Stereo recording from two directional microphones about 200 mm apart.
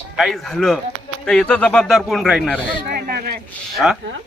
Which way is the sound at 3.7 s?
Centre (ahead or behind).